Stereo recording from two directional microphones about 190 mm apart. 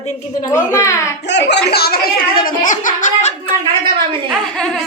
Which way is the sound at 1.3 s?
65° left (ahead or behind).